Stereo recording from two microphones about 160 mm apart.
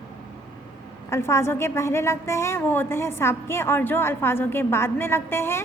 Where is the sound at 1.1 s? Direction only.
15° left (ahead or behind).